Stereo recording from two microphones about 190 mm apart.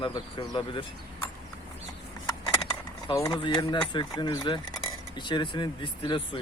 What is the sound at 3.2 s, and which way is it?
Speech, 25° left (ahead or behind).